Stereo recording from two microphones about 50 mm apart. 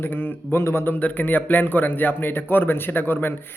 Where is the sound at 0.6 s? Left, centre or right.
Left.